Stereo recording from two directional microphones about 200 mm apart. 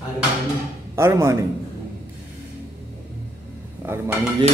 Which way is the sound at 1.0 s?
15° right (ahead or behind).